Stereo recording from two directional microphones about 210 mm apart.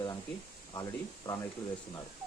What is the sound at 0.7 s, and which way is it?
Speech, 15° left (ahead or behind).